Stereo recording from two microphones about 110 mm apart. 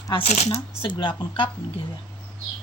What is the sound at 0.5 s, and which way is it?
Speech, 45° left (ahead or behind).